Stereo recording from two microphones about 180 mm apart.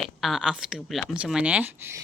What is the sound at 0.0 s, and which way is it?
Speech, centre (ahead or behind).